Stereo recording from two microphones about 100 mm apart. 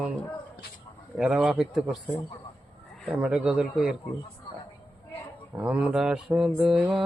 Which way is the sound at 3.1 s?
10° right (ahead or behind).